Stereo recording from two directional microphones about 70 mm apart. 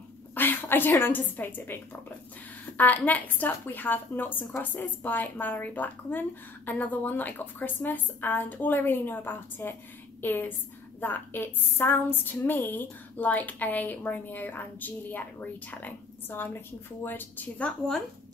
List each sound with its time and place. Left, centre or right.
0.3 s a woman's voice: left
17.6 s speech: centre